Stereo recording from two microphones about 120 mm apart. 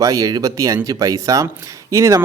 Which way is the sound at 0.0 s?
30° right (ahead or behind).